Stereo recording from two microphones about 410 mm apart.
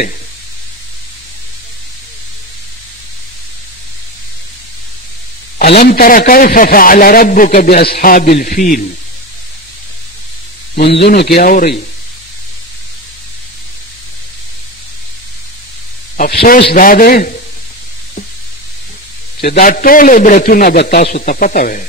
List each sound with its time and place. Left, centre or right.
5.6 s a man's voice: left
10.7 s a man's voice: left
16.2 s a man's voice: left
19.4 s a man's voice: centre